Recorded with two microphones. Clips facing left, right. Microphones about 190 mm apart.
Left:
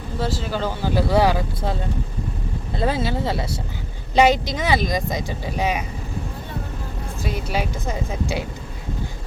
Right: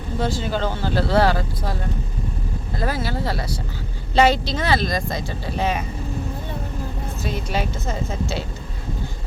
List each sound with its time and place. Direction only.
0.2 s speech: 5° left (ahead or behind)
7.2 s speech: 10° left (ahead or behind)